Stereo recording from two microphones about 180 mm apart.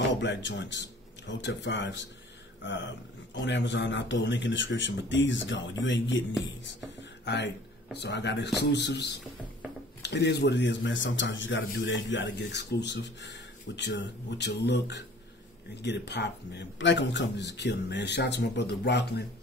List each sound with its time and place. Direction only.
0.1 s speech: 80° left
6.4 s speech: 80° left
17.6 s speech: 70° left (ahead or behind)